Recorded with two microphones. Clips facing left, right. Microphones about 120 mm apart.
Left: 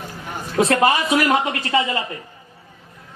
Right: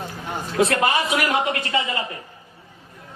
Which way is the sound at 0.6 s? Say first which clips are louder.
Left 3 dB; 30° left (ahead or behind).